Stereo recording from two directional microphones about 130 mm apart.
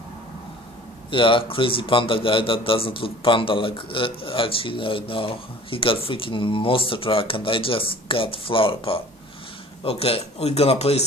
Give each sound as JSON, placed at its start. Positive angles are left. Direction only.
{"t": 1.1, "sound": "a man's voice", "side_deg": 40}